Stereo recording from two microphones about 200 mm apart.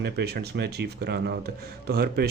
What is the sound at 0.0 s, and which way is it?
A woman's voice, 55° right (ahead or behind).